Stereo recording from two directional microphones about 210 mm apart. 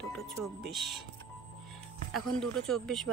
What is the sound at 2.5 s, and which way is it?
Speech, 5° left (ahead or behind).